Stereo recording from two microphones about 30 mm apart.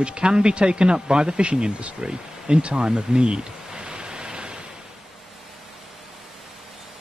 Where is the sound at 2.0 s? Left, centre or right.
Right.